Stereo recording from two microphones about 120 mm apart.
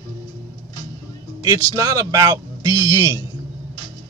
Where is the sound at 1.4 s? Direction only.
30° right (ahead or behind).